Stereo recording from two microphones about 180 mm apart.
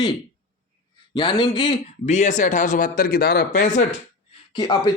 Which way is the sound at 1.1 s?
25° left (ahead or behind).